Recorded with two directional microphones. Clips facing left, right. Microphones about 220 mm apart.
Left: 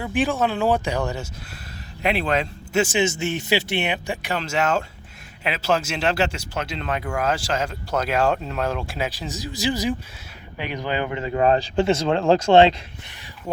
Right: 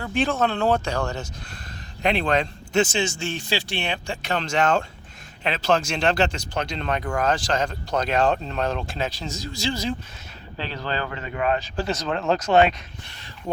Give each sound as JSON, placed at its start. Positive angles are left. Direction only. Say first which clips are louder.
{"t": 0.0, "sound": "speech", "louder": "left 1 dB", "side_deg": 15}
{"t": 3.0, "sound": "speech", "louder": "left 4 dB", "side_deg": 20}